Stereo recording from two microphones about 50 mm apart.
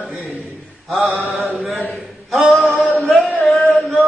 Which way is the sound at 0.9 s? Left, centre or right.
Centre.